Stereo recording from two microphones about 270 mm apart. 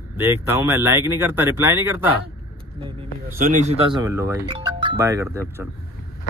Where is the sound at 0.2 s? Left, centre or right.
Centre.